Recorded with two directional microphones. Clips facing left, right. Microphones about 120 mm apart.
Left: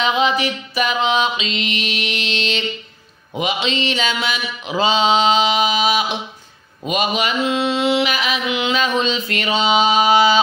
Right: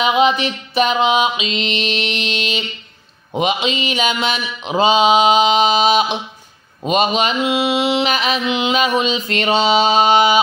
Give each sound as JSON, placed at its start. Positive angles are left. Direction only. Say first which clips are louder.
{"t": 0.0, "sound": "music", "louder": "right 3 dB", "side_deg": -15}
{"t": 3.6, "sound": "music", "louder": "right 2 dB", "side_deg": -15}
{"t": 7.4, "sound": "a sound", "louder": "right 1 dB", "side_deg": -15}
{"t": 8.0, "sound": "music", "louder": "right 2 dB", "side_deg": -30}
{"t": 9.3, "sound": "music", "louder": "right 4 dB", "side_deg": -30}